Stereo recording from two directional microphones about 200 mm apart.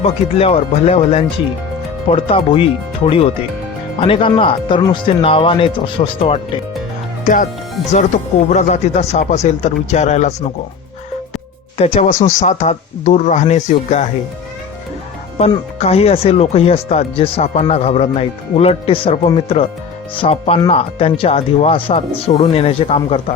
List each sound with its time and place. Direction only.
0.0 s speech: 30° left (ahead or behind)
7.9 s speech: 35° left (ahead or behind)
11.8 s speech: 35° left (ahead or behind)
15.4 s speech: 30° left (ahead or behind)